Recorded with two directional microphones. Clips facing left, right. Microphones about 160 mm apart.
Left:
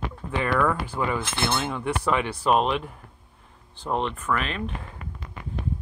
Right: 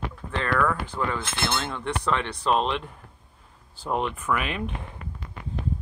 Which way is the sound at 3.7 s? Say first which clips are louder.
Even; 5° right (ahead or behind).